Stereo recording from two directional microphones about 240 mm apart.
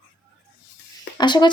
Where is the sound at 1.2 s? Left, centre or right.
Centre.